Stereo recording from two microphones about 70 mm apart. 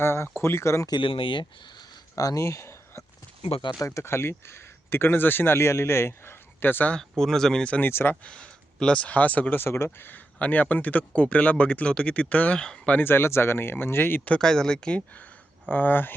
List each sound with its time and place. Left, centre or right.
0.0 s speech: left
2.1 s speech: left
6.9 s speech: centre
7.8 s speech: left
8.2 s speech: centre
9.6 s speech: left
10.3 s speech: left
13.0 s speech: left
14.3 s speech: centre; by 16.1 s left